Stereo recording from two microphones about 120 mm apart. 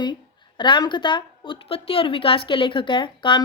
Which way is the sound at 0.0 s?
40° left (ahead or behind).